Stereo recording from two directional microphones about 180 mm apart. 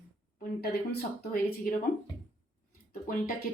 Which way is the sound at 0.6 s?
60° left (ahead or behind).